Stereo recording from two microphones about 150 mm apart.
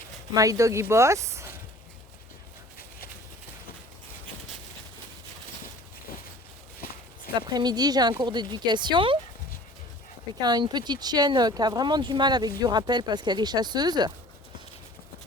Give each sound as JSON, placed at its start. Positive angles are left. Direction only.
{"t": 0.3, "sound": "speech", "side_deg": -20}
{"t": 7.3, "sound": "speech", "side_deg": -30}
{"t": 10.4, "sound": "speech", "side_deg": -30}